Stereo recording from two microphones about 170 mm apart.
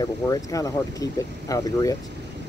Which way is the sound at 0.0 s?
20° left (ahead or behind).